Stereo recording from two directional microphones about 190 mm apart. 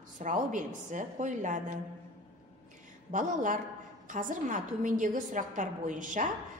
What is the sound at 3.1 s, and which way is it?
A woman's voice, 40° right (ahead or behind).